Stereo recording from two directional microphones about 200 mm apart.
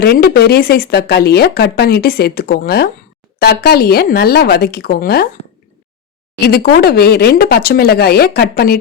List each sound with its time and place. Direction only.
0.0 s speech: 50° left (ahead or behind)
6.4 s speech: 50° left (ahead or behind)